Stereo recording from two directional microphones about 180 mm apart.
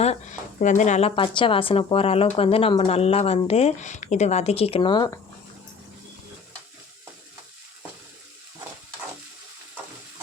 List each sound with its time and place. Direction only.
0.0 s speech: 40° left (ahead or behind); by 5.2 s 20° left (ahead or behind)